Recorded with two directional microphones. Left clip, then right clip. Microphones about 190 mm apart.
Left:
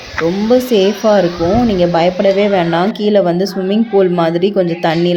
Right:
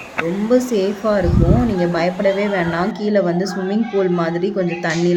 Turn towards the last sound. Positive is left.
turn(degrees=20)  # may be behind; listen again after turning